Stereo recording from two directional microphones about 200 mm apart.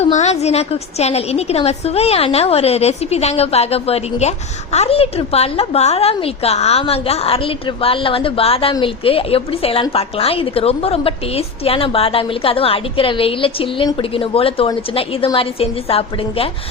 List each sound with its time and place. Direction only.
0.0 s a woman's voice: 35° left (ahead or behind)